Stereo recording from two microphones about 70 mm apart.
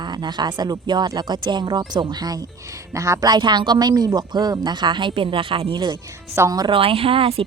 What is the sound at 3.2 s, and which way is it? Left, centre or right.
Speech, right.